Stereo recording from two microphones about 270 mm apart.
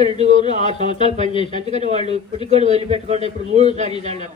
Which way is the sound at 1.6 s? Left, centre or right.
Right.